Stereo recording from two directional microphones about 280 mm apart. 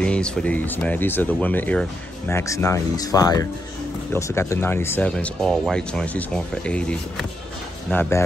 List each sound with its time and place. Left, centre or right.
0.0 s speech: centre